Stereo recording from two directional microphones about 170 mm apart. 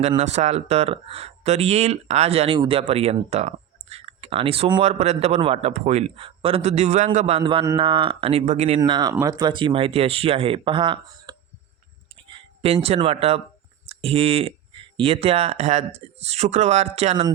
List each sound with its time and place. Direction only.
0.2 s speech: 40° right (ahead or behind)
8.8 s speech: 25° right (ahead or behind)